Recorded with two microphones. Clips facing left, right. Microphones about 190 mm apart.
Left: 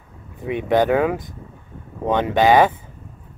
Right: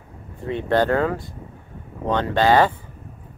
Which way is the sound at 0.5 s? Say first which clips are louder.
Left 2 dB; 15° left (ahead or behind).